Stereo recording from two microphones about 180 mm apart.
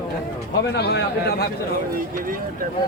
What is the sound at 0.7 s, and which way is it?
Speech, 70° left (ahead or behind).